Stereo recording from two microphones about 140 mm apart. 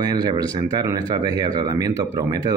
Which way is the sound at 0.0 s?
30° right (ahead or behind).